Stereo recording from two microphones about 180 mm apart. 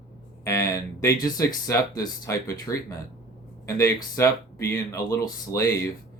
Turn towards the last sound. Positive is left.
turn(degrees=15)  # may be behind; listen again after turning